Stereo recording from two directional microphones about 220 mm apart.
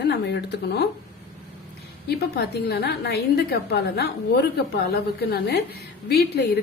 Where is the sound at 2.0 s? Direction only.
45° left (ahead or behind).